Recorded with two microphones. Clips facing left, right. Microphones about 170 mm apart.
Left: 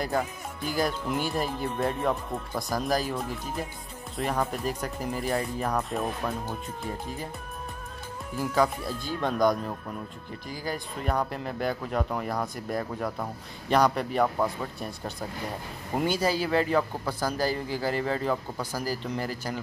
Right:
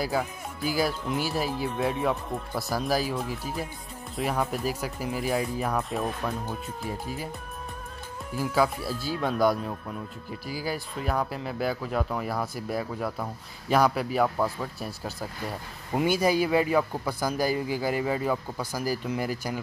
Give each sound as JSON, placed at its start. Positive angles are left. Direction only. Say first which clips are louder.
{"t": 0.0, "sound": "speech", "louder": "even", "side_deg": -5}
{"t": 8.4, "sound": "a man's voice", "louder": "even", "side_deg": -5}